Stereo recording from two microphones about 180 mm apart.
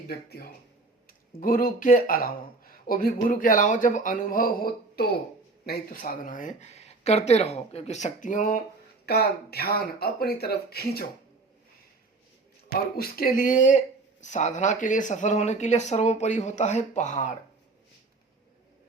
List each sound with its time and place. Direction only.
0.1 s speech: 60° left (ahead or behind); by 8.6 s 45° left (ahead or behind)
9.0 s speech: 60° left (ahead or behind)
12.7 s speech: 55° left (ahead or behind)